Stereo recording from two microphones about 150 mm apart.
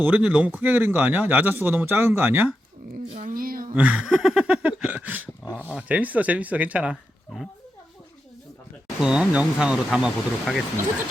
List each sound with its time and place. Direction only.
0.0 s dog: 10° right (ahead or behind)
3.2 s speech: 70° right (ahead or behind)
3.8 s dog: 10° right (ahead or behind)
7.3 s speech: 5° right (ahead or behind)
9.0 s speech: 5° right (ahead or behind)